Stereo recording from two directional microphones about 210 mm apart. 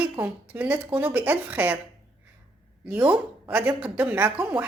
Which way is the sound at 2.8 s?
5° right (ahead or behind).